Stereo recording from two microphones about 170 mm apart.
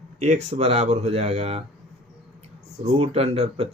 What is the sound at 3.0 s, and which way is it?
Speech, 35° right (ahead or behind).